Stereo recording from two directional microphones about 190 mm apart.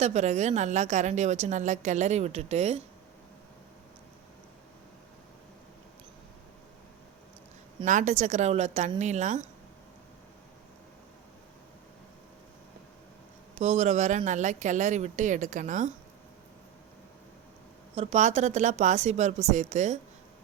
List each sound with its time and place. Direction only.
0.0 s a woman's voice: 35° right (ahead or behind)
7.9 s a woman's voice: 40° right (ahead or behind)
13.6 s a woman's voice: 35° right (ahead or behind)
17.9 s a woman's voice: 35° right (ahead or behind)